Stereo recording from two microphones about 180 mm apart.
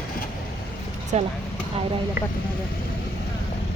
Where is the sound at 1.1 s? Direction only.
40° right (ahead or behind).